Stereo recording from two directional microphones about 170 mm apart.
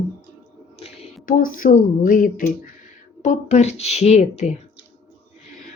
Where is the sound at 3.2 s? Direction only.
40° left (ahead or behind).